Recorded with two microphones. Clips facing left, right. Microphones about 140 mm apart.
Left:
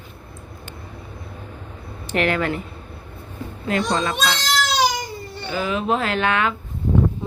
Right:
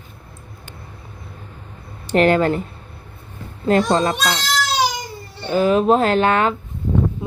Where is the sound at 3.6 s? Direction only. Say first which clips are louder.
Right 6 dB; 35° right (ahead or behind).